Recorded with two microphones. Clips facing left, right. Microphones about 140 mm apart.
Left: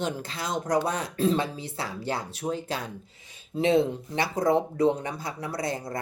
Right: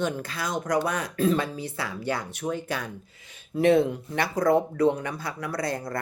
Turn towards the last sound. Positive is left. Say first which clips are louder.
# right 1 dB
turn(degrees=20)  # may be behind; listen again after turning